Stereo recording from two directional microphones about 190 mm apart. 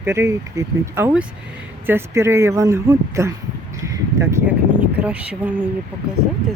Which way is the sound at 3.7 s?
15° right (ahead or behind).